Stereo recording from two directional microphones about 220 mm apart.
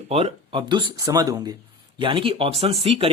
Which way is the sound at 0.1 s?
25° right (ahead or behind).